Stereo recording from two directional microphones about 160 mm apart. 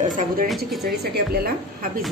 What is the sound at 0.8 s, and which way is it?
A woman's voice, 80° right.